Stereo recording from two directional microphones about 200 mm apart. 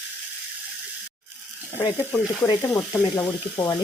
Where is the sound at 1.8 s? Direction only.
20° left (ahead or behind).